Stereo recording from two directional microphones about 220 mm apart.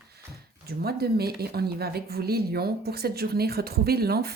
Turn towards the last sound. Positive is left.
turn(degrees=-45)  # may be behind; listen again after turning